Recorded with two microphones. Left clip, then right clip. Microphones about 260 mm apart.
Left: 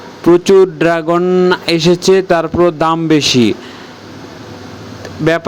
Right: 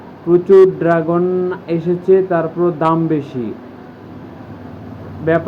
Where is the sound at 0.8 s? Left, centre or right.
Left.